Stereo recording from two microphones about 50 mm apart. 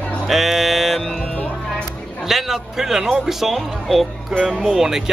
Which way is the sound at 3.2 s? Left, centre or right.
Centre.